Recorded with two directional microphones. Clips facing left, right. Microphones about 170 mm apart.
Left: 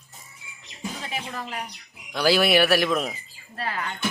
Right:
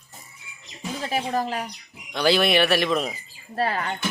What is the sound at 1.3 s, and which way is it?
Speech, 35° right (ahead or behind).